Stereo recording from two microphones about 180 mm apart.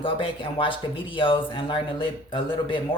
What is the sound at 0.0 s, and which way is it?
Speech, 30° left (ahead or behind).